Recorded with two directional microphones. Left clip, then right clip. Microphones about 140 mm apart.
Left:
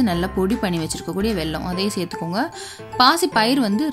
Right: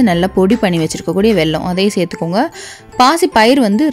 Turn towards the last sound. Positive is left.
turn(degrees=-45)  # may be behind; listen again after turning